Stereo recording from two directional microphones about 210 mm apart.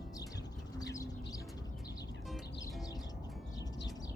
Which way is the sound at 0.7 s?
15° left (ahead or behind).